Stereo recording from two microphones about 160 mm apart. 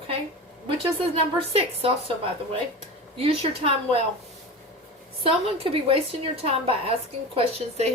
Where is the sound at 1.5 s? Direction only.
35° right (ahead or behind).